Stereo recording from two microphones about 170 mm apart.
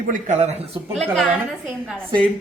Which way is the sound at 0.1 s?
45° right (ahead or behind).